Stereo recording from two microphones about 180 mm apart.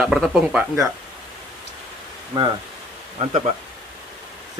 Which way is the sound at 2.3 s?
25° right (ahead or behind).